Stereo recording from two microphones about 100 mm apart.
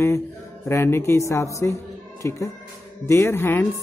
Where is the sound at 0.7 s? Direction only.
25° left (ahead or behind).